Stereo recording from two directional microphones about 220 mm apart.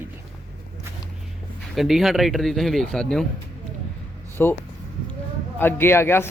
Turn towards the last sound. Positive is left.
turn(degrees=10)  # may be behind; listen again after turning